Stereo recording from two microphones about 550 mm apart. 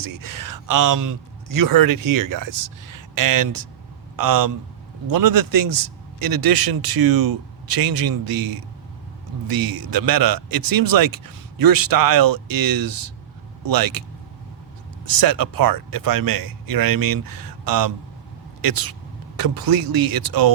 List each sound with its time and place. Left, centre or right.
0.0 s speech: right
15.0 s speech: right